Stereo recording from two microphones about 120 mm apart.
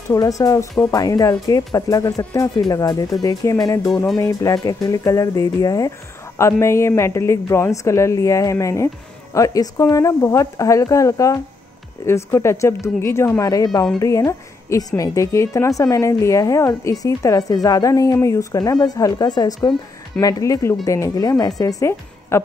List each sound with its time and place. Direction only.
0.1 s speech: 25° left (ahead or behind)